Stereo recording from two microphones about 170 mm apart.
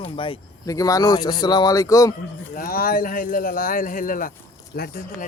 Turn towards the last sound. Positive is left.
turn(degrees=60)  # may be behind; listen again after turning